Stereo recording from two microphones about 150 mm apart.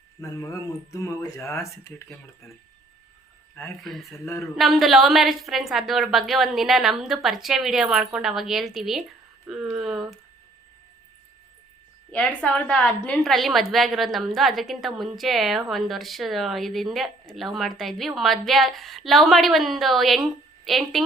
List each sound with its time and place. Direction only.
0.2 s speech: 20° left (ahead or behind)
4.5 s a woman's voice: centre (ahead or behind)
12.1 s a woman's voice: 10° left (ahead or behind)